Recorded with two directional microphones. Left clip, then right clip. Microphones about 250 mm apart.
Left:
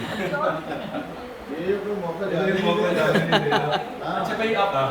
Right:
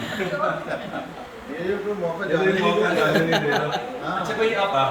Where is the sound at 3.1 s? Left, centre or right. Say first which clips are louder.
Even; centre.